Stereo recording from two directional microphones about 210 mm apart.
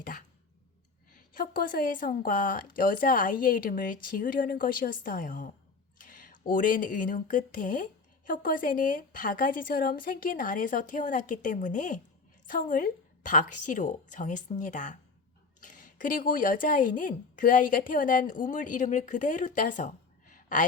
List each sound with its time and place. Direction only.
0.0 s throat clearing: 40° left (ahead or behind)
1.4 s a woman's voice: 40° left (ahead or behind)
20.3 s a sound: 40° left (ahead or behind)